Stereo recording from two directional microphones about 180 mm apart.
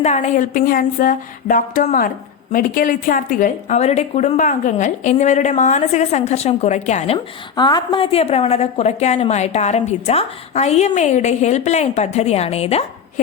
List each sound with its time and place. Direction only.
0.0 s a woman's voice: 40° left (ahead or behind)
7.5 s a woman's voice: 25° left (ahead or behind)